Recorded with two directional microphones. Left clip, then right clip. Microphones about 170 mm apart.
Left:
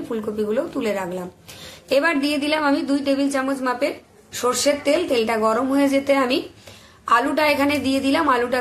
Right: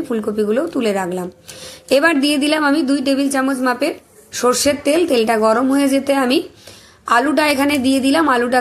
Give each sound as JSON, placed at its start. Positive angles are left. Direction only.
{"t": 0.1, "sound": "a woman's voice", "side_deg": -35}